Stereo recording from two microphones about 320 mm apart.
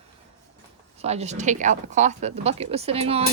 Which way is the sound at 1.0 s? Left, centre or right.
Right.